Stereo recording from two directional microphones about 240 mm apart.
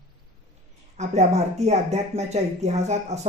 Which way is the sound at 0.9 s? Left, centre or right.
Right.